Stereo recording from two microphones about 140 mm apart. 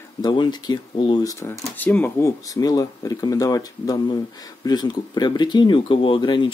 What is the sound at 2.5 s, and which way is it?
Speech, 25° left (ahead or behind).